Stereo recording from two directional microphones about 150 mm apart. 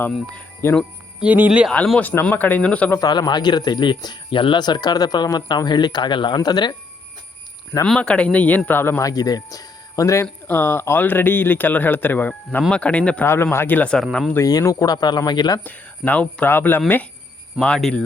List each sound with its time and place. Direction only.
0.6 s speech: 15° left (ahead or behind)
1.2 s speech: 10° right (ahead or behind)
1.7 s speech: 10° left (ahead or behind)
3.0 s speech: 25° left (ahead or behind)
7.9 s speech: 5° left (ahead or behind)
14.3 s speech: 20° left (ahead or behind)
15.6 s speech: 10° left (ahead or behind)
17.6 s speech: 5° left (ahead or behind)